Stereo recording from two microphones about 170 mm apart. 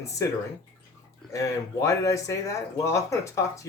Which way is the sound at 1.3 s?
20° left (ahead or behind).